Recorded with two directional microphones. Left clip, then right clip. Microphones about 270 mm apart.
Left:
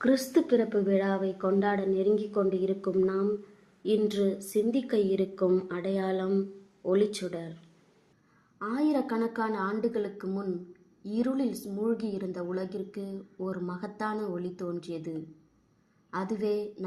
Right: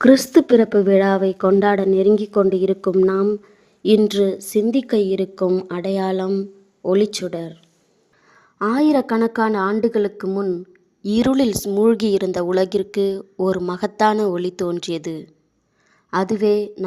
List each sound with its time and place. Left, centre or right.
0.0 s a woman's voice: right
8.5 s a woman's voice: right